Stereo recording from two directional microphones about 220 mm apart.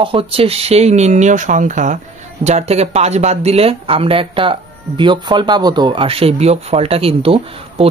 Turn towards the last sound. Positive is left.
turn(degrees=-25)  # may be behind; listen again after turning